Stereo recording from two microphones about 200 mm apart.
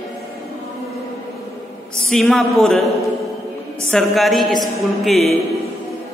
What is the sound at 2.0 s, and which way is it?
A man's voice, centre (ahead or behind).